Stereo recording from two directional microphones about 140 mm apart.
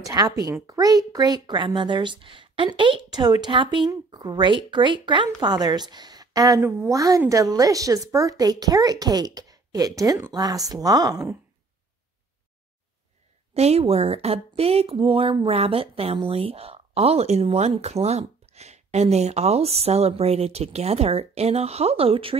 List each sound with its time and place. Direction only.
0.0 s a woman's voice: 25° right (ahead or behind)
13.6 s speech: 50° right (ahead or behind)